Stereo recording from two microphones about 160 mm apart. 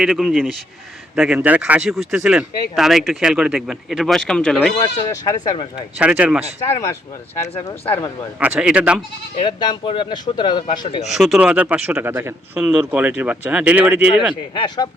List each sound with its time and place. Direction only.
0.0 s speech: centre (ahead or behind)
4.8 s speech: 20° left (ahead or behind)
6.0 s speech: 5° right (ahead or behind)
8.4 s speech: 5° right (ahead or behind)
9.4 s speech: 30° left (ahead or behind)
11.1 s speech: centre (ahead or behind)
14.5 s speech: 30° left (ahead or behind)